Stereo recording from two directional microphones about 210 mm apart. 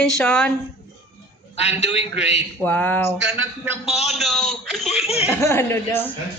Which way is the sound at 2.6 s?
10° left (ahead or behind).